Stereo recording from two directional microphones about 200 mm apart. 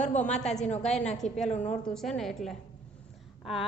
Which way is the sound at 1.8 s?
5° left (ahead or behind).